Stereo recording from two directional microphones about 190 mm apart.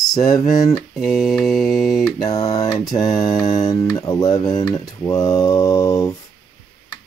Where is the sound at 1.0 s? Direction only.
Centre (ahead or behind).